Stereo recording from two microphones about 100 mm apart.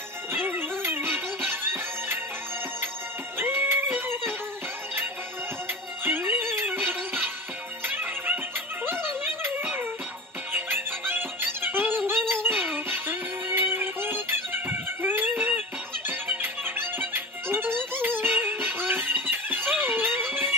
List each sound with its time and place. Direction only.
0.3 s music: 20° right (ahead or behind)
3.3 s music: 20° right (ahead or behind)
5.6 s music: 20° right (ahead or behind)